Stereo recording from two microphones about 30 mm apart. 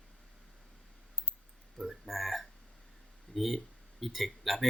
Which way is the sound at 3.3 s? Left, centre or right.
Centre.